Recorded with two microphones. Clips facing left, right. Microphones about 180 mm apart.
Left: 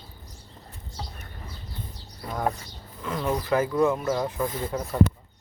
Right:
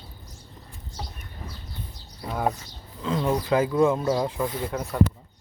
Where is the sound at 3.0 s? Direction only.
20° right (ahead or behind).